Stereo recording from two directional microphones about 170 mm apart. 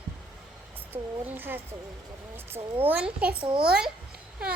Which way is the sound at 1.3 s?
10° right (ahead or behind).